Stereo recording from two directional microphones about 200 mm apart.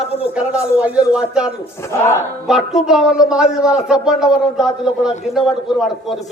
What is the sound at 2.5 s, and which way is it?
A man's voice, centre (ahead or behind).